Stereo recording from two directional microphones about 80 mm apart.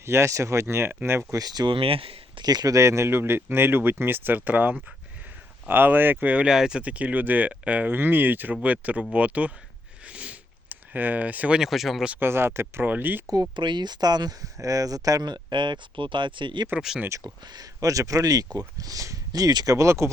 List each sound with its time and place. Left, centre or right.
0.0 s speech: right
1.4 s speech: right
2.7 s speech: right; by 9.5 s centre
10.1 s a sound: centre
11.6 s speech: centre
12.2 s speech: right
13.2 s speech: right
17.2 s speech: right
19.7 s speech: right